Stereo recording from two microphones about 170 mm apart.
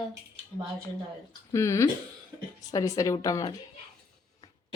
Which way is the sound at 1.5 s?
15° left (ahead or behind).